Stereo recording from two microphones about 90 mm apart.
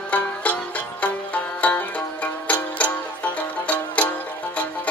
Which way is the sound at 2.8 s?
15° left (ahead or behind).